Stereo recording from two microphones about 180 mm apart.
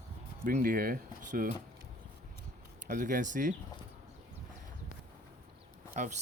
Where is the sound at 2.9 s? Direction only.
45° right (ahead or behind).